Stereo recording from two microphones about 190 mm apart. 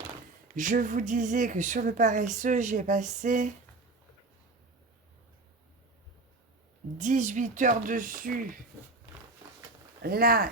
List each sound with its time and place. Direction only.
0.5 s a woman's voice: 45° right (ahead or behind)
7.0 s speech: 40° right (ahead or behind)
10.0 s speech: 50° right (ahead or behind)